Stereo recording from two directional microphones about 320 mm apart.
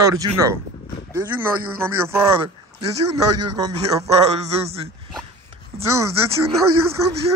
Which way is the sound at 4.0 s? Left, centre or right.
Centre.